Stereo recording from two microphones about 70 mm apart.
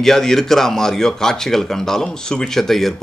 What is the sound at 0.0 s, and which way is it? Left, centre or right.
A man's voice, centre.